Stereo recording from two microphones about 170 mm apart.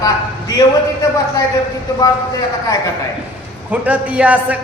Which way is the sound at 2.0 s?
20° left (ahead or behind).